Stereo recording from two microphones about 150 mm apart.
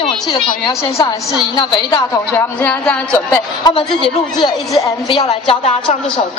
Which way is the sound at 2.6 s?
10° left (ahead or behind).